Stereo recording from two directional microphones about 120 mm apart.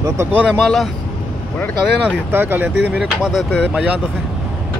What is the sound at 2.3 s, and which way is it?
Speech, 15° right (ahead or behind).